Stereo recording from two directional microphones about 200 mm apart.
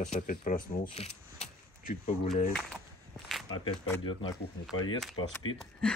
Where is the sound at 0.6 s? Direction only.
30° left (ahead or behind).